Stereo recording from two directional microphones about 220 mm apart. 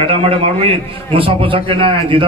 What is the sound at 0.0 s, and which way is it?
A man's voice, 25° right (ahead or behind).